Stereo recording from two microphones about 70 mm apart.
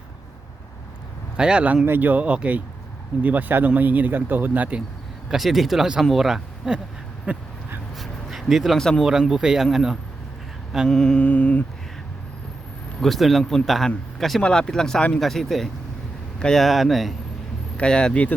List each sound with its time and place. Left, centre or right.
1.4 s speech: centre
5.3 s speech: centre
7.3 s speech: centre
7.9 s a sound: centre
9.0 s speech: centre
10.8 s mantra: centre
13.0 s speech: centre
13.4 s speech: centre
13.7 s speech: centre
15.2 s speech: centre
17.7 s speech: centre